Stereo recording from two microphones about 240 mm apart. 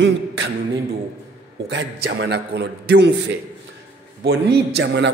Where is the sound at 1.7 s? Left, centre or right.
Right.